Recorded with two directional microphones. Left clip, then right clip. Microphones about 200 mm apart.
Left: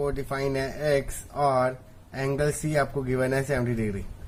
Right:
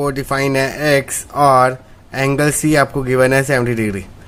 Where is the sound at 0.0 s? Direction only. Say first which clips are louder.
Right 11 dB; 40° right (ahead or behind).